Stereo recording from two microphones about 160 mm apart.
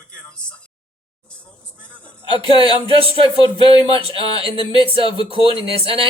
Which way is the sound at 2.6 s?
35° right (ahead or behind).